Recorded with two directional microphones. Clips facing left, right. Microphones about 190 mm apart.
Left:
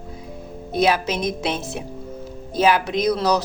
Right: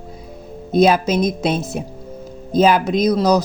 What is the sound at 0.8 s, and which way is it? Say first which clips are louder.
Speech: right 5 dB; 45° right (ahead or behind).